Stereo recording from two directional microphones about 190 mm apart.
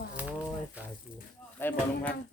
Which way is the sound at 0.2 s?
10° right (ahead or behind).